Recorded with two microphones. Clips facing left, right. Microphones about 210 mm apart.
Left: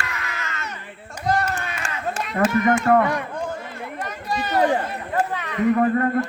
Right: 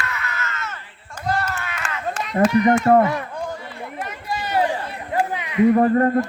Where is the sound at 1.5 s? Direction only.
10° left (ahead or behind).